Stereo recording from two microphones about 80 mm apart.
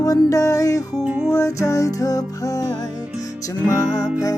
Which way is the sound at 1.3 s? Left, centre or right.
Left.